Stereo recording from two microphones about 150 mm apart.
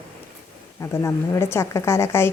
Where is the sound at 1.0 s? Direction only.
15° left (ahead or behind).